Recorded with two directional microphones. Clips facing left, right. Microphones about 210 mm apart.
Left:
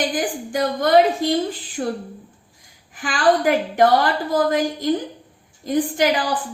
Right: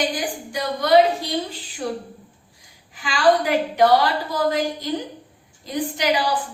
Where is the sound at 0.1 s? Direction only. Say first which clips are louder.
Left 4 dB; 50° left (ahead or behind).